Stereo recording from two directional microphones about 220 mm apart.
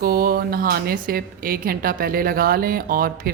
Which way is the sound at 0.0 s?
40° right (ahead or behind).